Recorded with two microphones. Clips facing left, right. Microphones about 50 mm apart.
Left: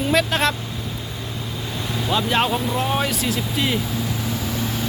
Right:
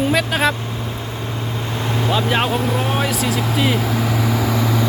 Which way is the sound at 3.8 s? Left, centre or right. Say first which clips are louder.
Right 6 dB; right.